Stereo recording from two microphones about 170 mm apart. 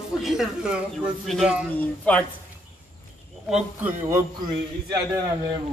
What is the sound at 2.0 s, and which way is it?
Speech, 10° left (ahead or behind).